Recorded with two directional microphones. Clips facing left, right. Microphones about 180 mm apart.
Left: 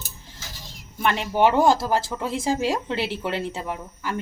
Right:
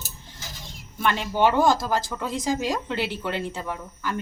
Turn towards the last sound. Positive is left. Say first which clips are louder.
# left 1 dB
turn(degrees=25)  # may be behind; listen again after turning